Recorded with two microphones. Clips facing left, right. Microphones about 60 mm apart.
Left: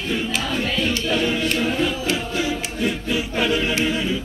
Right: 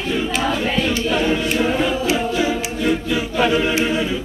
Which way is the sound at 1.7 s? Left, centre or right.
Centre.